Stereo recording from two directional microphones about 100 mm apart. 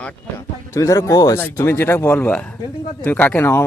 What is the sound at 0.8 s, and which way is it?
Speech, 30° left (ahead or behind).